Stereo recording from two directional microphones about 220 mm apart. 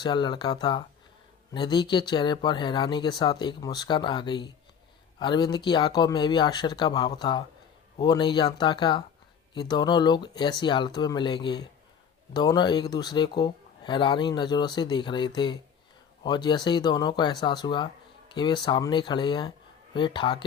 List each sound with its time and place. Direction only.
0.0 s speech: 20° left (ahead or behind)